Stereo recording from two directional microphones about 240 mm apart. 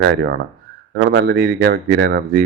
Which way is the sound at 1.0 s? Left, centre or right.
Right.